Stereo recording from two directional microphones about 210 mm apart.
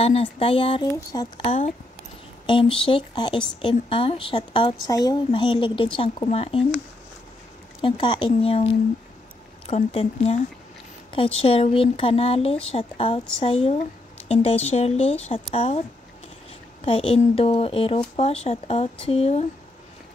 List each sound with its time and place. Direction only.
0.0 s speech: 25° left (ahead or behind)
7.8 s speech: 25° left (ahead or behind)
9.7 s speech: 30° left (ahead or behind)
16.8 s speech: 25° left (ahead or behind)